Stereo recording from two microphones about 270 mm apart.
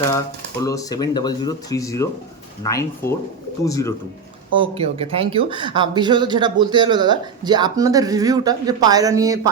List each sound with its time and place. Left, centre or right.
0.6 s speech: centre
4.5 s speech: centre